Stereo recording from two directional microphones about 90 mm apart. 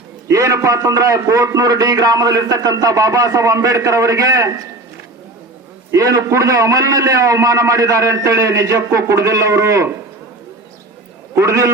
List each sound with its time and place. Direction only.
0.3 s a man's voice: 35° right (ahead or behind)
5.9 s a man's voice: 35° right (ahead or behind)
11.3 s a man's voice: 30° right (ahead or behind)